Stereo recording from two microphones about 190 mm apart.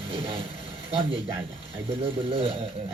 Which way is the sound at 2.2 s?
30° right (ahead or behind).